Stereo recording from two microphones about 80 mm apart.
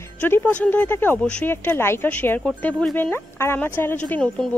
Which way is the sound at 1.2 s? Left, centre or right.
Centre.